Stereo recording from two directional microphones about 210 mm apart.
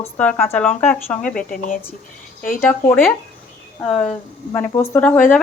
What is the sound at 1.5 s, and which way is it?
Speech, 40° left (ahead or behind).